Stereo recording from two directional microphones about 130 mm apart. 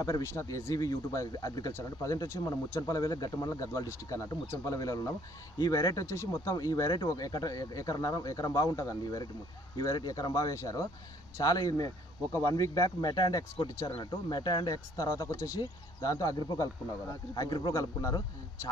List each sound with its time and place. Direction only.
0.0 s a man's voice: 20° left (ahead or behind)